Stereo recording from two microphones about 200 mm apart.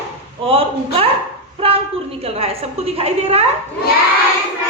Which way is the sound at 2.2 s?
30° right (ahead or behind).